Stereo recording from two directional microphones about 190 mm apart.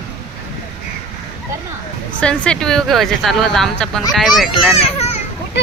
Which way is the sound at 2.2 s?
5° left (ahead or behind).